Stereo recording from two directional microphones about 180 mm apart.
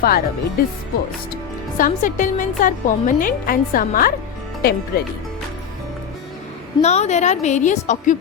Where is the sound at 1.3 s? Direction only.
50° left (ahead or behind).